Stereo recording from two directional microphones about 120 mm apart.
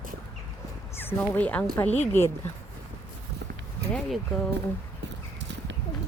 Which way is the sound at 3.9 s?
Centre (ahead or behind).